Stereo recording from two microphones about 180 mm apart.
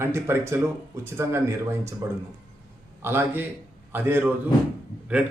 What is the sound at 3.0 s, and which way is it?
Speech, 15° right (ahead or behind).